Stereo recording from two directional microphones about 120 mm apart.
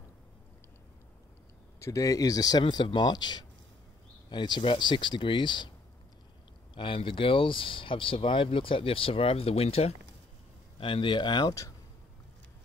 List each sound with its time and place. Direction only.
1.8 s speech: 25° left (ahead or behind)
6.7 s speech: 45° left (ahead or behind)
10.8 s speech: 45° left (ahead or behind); by 11.7 s 30° left (ahead or behind)